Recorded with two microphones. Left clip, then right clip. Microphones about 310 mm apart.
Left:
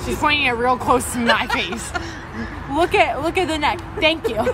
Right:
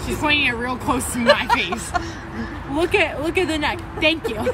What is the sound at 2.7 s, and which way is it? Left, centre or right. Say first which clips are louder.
A woman's voice: left 3 dB; centre.